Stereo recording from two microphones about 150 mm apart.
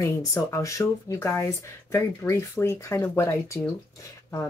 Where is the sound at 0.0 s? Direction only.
20° left (ahead or behind).